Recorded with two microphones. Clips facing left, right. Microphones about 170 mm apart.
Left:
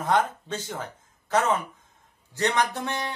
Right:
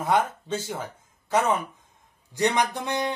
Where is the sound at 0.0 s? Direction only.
10° right (ahead or behind).